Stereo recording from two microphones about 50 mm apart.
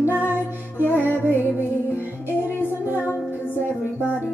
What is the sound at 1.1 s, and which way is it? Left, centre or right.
Music, left.